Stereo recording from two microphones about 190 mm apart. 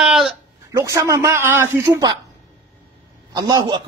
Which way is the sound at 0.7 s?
15° right (ahead or behind).